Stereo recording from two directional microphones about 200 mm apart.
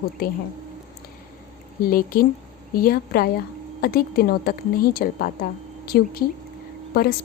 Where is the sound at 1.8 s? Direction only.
45° left (ahead or behind).